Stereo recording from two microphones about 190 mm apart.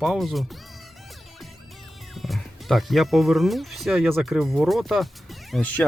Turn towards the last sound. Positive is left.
turn(degrees=10)  # may be behind; listen again after turning